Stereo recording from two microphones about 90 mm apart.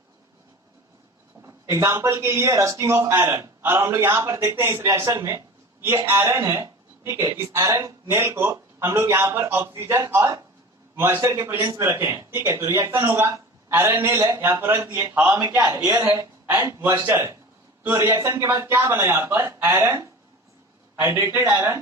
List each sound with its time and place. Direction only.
1.4 s a man's voice: 30° right (ahead or behind)
15.4 s a man's voice: 35° right (ahead or behind)
21.0 s a man's voice: 25° right (ahead or behind)